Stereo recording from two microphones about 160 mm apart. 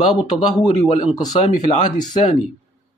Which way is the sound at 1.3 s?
45° left (ahead or behind).